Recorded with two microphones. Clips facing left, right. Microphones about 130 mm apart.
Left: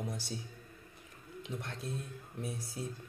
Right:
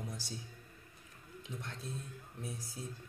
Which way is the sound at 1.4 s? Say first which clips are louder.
Left 4 dB; 70° left (ahead or behind).